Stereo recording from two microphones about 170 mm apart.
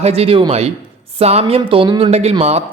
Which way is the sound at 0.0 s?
35° right (ahead or behind).